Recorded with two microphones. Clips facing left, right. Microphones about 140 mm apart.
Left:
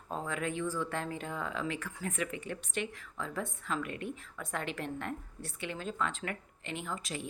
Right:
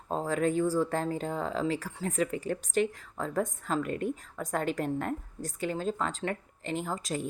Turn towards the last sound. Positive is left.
turn(degrees=-40)  # may be behind; listen again after turning